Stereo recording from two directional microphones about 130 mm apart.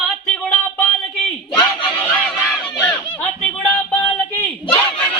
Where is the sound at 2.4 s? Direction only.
10° left (ahead or behind).